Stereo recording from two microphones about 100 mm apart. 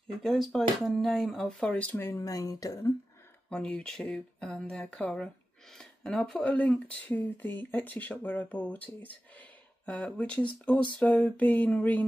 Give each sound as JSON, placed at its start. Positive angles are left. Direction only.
{"t": 0.2, "sound": "speech", "side_deg": 0}
{"t": 2.0, "sound": "speech", "side_deg": 35}
{"t": 3.4, "sound": "speech", "side_deg": 10}